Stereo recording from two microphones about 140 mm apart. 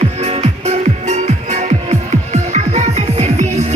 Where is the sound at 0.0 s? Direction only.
50° right (ahead or behind).